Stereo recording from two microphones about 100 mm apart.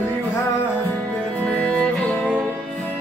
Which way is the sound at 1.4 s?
10° left (ahead or behind).